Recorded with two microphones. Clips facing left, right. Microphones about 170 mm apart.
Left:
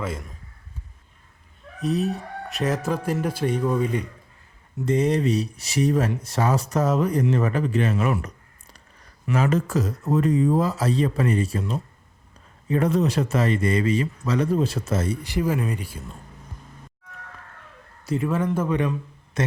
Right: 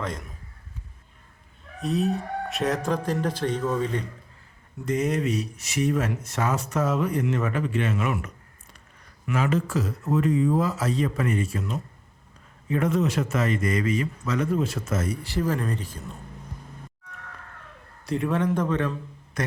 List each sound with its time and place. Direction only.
0.0 s a man's voice: 5° left (ahead or behind)
1.8 s speech: centre (ahead or behind)
4.9 s speech: 30° left (ahead or behind)
15.2 s speech: 15° left (ahead or behind)
18.0 s a man's voice: centre (ahead or behind)
19.4 s speech: 25° left (ahead or behind)